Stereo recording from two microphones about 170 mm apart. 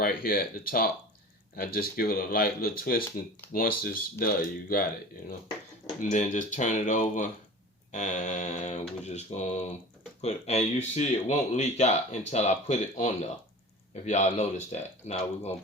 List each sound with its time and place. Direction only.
0.0 s speech: 60° left (ahead or behind)
6.0 s speech: 45° left (ahead or behind)